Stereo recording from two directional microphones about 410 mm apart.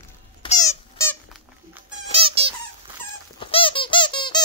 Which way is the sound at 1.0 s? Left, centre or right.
Centre.